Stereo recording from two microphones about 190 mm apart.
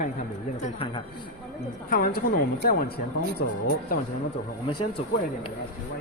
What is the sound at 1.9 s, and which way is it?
Speech, 50° left (ahead or behind).